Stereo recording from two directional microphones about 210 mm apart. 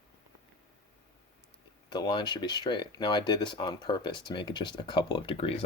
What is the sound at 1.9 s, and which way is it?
Speech, 20° left (ahead or behind).